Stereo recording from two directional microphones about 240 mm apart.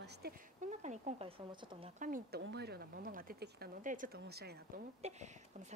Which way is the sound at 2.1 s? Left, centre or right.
Right.